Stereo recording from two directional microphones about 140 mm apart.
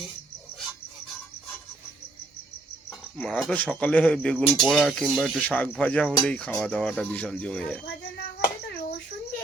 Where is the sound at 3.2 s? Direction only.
5° left (ahead or behind).